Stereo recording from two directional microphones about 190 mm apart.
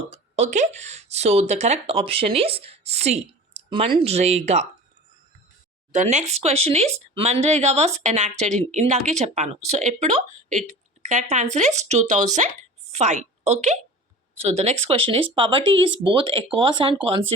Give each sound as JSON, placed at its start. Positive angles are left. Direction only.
{"t": 0.1, "sound": "speech", "side_deg": -35}
{"t": 5.9, "sound": "a woman's voice", "side_deg": -40}